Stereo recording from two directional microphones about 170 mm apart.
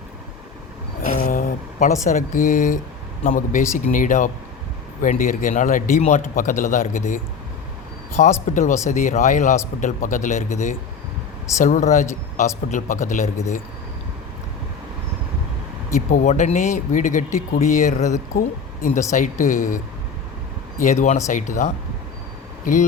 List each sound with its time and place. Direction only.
1.0 s a sound: 55° left (ahead or behind)
2.0 s speech: 50° left (ahead or behind)
16.0 s speech: 45° left (ahead or behind)